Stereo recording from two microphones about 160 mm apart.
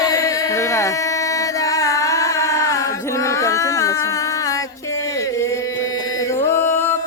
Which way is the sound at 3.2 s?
20° left (ahead or behind).